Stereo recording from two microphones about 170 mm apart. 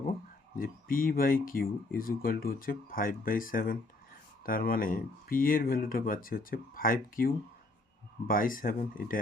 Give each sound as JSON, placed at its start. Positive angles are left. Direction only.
{"t": 0.6, "sound": "speech", "side_deg": 55}